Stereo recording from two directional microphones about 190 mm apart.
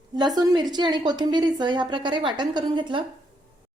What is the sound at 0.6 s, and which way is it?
A woman's voice, 25° right (ahead or behind).